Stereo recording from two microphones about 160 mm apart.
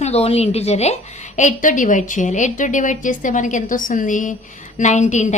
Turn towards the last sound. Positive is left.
turn(degrees=50)  # may be behind; listen again after turning